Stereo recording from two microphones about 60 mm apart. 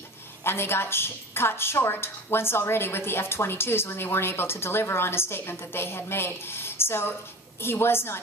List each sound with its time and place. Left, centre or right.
0.4 s a woman's voice: left